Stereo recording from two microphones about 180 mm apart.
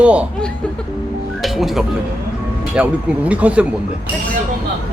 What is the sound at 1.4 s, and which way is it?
Music, centre (ahead or behind).